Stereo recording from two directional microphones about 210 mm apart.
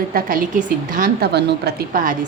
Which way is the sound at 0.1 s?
45° right (ahead or behind).